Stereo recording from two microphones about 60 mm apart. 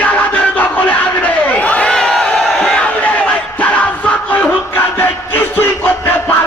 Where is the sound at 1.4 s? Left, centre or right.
Left; by 2.6 s centre.